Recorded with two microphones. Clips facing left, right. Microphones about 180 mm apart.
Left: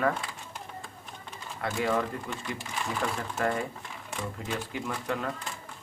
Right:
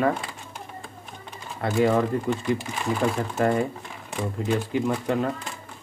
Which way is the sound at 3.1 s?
30° right (ahead or behind).